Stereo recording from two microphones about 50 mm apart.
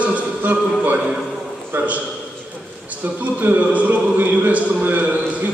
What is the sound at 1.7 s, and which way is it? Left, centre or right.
Speech, right.